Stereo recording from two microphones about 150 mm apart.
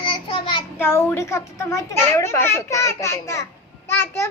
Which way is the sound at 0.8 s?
15° left (ahead or behind).